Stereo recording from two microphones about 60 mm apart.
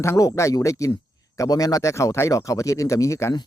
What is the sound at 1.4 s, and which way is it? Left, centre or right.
Speech, left.